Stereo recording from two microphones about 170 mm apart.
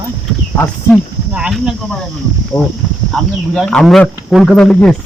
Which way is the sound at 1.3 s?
5° right (ahead or behind).